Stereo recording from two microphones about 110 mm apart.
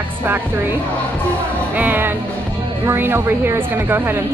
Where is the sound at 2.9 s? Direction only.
20° right (ahead or behind).